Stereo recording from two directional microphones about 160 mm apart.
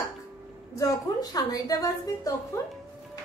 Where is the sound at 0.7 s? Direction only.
20° left (ahead or behind).